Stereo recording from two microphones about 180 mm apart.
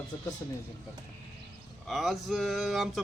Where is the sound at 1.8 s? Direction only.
Centre (ahead or behind).